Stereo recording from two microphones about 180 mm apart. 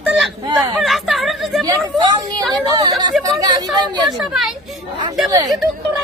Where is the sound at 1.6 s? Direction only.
25° right (ahead or behind).